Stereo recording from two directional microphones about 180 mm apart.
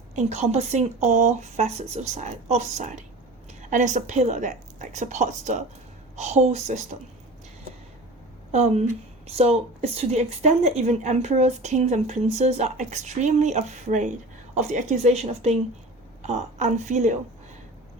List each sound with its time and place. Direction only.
0.2 s a woman's voice: 40° right (ahead or behind)
8.5 s a woman's voice: 35° right (ahead or behind)